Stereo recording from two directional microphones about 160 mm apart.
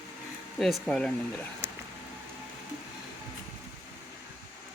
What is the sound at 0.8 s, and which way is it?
Speech, 5° left (ahead or behind).